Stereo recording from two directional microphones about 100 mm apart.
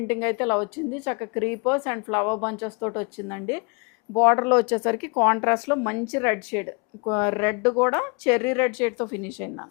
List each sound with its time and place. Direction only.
0.1 s speech: 15° left (ahead or behind)